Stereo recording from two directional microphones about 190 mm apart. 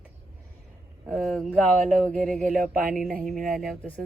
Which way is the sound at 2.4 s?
45° right (ahead or behind).